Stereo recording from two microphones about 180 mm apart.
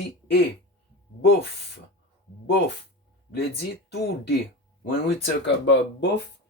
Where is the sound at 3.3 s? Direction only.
65° left (ahead or behind).